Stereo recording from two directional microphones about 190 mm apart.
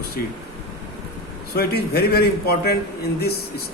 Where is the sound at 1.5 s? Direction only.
55° left (ahead or behind).